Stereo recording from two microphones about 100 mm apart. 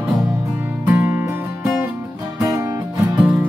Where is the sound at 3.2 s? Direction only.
15° right (ahead or behind).